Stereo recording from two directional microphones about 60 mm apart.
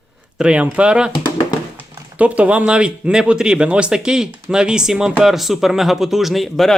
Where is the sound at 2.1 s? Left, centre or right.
Right; by 6.7 s centre.